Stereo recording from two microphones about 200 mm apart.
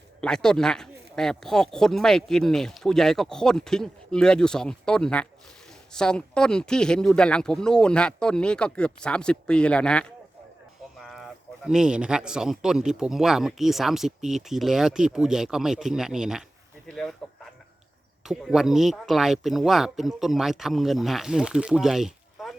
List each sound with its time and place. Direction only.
0.2 s a man's voice: 5° left (ahead or behind)
18.3 s a man's voice: centre (ahead or behind)